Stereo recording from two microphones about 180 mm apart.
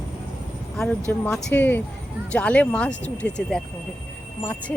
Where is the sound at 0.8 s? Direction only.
5° left (ahead or behind).